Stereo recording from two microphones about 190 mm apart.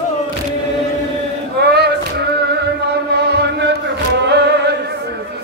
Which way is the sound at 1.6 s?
60° right (ahead or behind).